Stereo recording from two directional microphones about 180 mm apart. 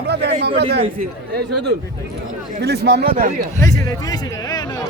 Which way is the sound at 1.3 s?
65° right (ahead or behind).